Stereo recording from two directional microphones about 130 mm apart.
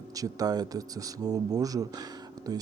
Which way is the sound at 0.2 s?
30° right (ahead or behind).